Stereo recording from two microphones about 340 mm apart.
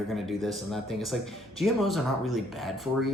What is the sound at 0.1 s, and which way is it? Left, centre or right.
Speech, centre.